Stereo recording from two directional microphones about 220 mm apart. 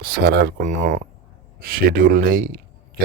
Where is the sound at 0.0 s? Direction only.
45° right (ahead or behind).